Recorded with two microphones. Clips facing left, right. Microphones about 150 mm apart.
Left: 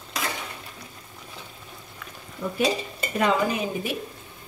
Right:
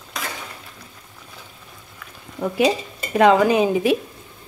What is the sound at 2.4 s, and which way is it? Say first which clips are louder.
Speech: right 6 dB; 90° right.